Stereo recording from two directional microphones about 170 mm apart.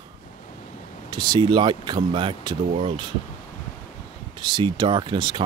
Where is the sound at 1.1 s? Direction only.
25° right (ahead or behind).